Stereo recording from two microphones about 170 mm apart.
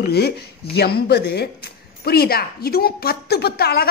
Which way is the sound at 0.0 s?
70° left (ahead or behind).